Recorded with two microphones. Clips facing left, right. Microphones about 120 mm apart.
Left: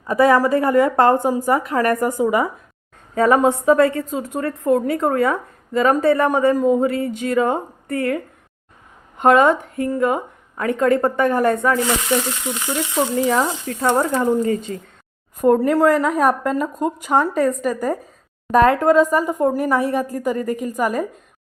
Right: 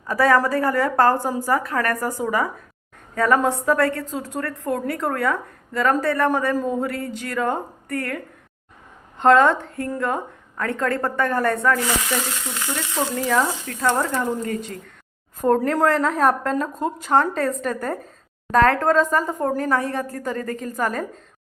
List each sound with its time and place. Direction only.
0.1 s a woman's voice: 20° left (ahead or behind)
15.4 s speech: 5° left (ahead or behind)